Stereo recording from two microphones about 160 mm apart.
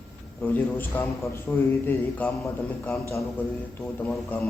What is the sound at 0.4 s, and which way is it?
A man's voice, 10° left (ahead or behind).